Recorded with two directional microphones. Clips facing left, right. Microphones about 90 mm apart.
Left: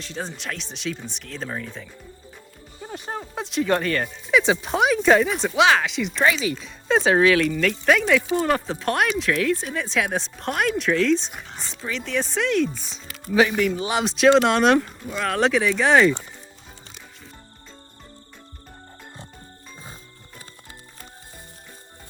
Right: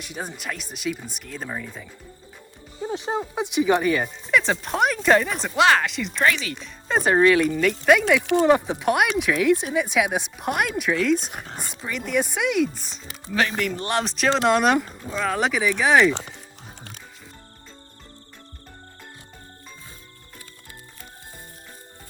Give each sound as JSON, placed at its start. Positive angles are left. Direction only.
{"t": 0.0, "sound": "speech", "side_deg": -10}